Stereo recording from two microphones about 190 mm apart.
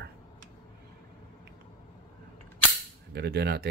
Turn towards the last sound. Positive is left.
turn(degrees=-60)  # may be behind; listen again after turning